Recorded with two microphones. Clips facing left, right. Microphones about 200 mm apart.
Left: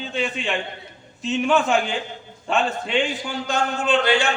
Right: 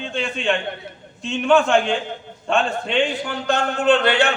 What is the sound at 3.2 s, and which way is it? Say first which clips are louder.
Speech: right 2 dB; 60° right (ahead or behind).